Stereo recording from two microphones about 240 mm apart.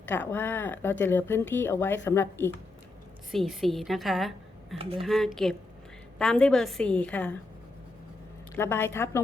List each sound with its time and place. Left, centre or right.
0.1 s speech: centre
3.3 s a woman's voice: centre
4.8 s speech: right
5.0 s a woman's voice: centre
8.5 s speech: centre